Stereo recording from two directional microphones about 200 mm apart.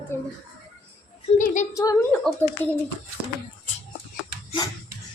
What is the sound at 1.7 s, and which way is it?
Speech, 15° left (ahead or behind).